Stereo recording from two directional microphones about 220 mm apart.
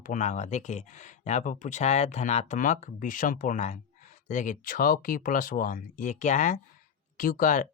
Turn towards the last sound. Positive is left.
turn(degrees=35)  # may be behind; listen again after turning